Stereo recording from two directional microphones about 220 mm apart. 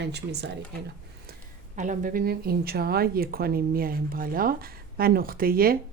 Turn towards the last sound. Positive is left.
turn(degrees=-40)  # may be behind; listen again after turning